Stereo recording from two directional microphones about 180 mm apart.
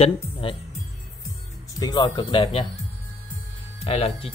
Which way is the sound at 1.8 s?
20° left (ahead or behind).